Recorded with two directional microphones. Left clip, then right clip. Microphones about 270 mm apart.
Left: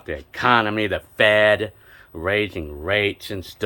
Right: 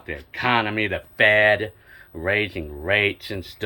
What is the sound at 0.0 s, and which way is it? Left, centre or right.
Speech, centre.